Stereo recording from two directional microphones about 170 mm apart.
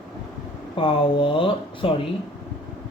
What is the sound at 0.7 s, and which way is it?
Speech, 30° left (ahead or behind).